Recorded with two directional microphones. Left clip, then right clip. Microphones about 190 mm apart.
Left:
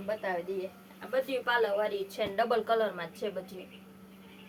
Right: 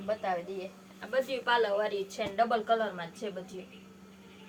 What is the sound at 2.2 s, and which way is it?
A woman's voice, 50° left (ahead or behind).